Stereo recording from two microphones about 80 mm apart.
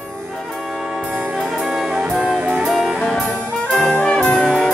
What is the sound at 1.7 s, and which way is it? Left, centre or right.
Brass instrument, centre.